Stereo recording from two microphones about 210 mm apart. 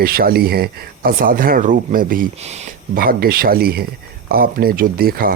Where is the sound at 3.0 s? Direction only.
45° right (ahead or behind).